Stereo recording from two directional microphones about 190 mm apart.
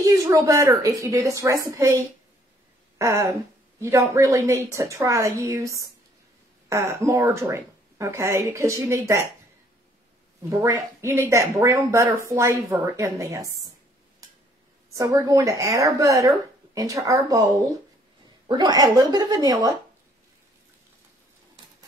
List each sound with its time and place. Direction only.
0.0 s speech: 20° right (ahead or behind)
10.5 s speech: 15° right (ahead or behind)
14.9 s speech: 15° right (ahead or behind)
18.5 s speech: 20° right (ahead or behind)